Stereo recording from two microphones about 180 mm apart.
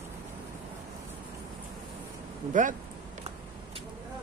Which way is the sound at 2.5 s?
45° right (ahead or behind).